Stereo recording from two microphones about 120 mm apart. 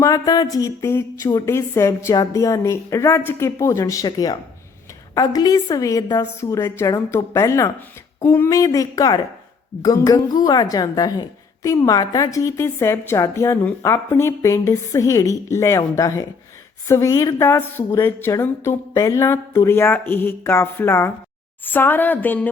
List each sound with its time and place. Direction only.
0.0 s a woman's voice: 30° left (ahead or behind)